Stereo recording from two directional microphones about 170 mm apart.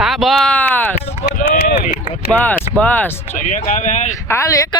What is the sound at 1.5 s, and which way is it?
Speech, 60° left (ahead or behind).